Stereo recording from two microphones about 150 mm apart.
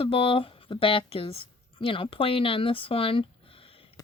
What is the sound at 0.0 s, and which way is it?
A woman's voice, 35° left (ahead or behind).